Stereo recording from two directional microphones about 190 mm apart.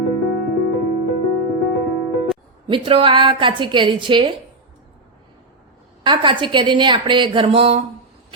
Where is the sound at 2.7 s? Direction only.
30° right (ahead or behind).